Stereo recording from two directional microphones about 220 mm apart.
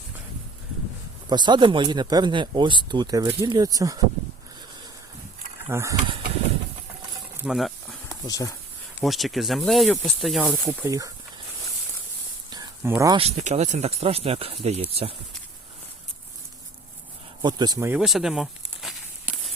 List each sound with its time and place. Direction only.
1.3 s speech: 20° right (ahead or behind)
5.6 s speech: 15° right (ahead or behind)
7.4 s speech: centre (ahead or behind)
8.3 s speech: 15° left (ahead or behind)
9.0 s speech: centre (ahead or behind)
12.5 s a sound: 15° right (ahead or behind)
13.1 s speech: 30° right (ahead or behind)
17.4 s a sound: 20° right (ahead or behind); by 19.4 s 5° right (ahead or behind)